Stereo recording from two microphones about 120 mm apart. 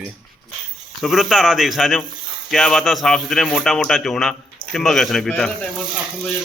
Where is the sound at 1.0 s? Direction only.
Centre (ahead or behind).